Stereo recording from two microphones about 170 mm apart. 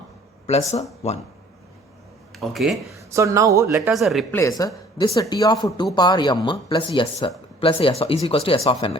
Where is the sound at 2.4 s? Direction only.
Centre (ahead or behind).